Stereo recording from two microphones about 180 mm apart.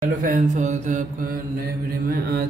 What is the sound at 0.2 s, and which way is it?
Mantra, 45° right (ahead or behind).